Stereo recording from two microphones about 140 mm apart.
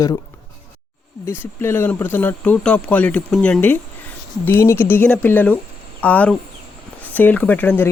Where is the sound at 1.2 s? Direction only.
15° left (ahead or behind).